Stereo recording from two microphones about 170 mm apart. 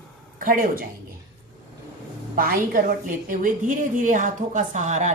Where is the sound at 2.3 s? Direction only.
55° right (ahead or behind).